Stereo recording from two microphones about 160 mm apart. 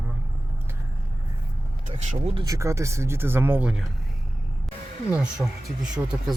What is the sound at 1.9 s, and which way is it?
Speech, 45° right (ahead or behind).